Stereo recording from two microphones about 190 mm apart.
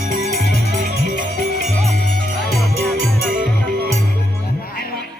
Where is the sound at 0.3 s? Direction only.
60° left (ahead or behind).